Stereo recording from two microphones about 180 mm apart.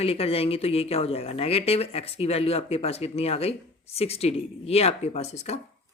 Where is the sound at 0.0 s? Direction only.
35° left (ahead or behind).